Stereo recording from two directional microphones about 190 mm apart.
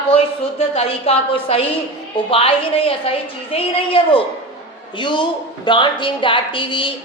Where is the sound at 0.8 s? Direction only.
30° left (ahead or behind).